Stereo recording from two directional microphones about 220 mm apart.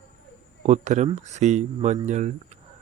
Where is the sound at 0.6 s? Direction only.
30° right (ahead or behind).